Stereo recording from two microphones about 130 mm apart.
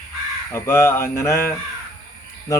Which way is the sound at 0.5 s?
20° left (ahead or behind).